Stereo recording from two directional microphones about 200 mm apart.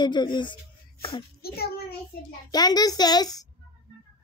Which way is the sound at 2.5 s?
20° left (ahead or behind).